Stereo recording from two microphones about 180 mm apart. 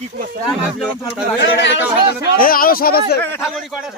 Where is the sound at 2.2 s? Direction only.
50° left (ahead or behind).